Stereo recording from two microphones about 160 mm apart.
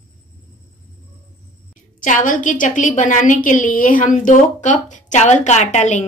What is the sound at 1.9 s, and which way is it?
A woman's voice, 55° left (ahead or behind).